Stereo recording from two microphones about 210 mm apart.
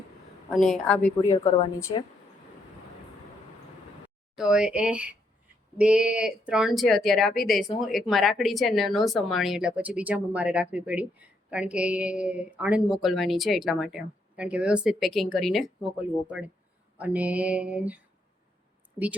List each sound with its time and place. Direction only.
0.5 s a woman's voice: centre (ahead or behind)
4.4 s a woman's voice: 5° right (ahead or behind)
17.0 s a sound: 5° right (ahead or behind)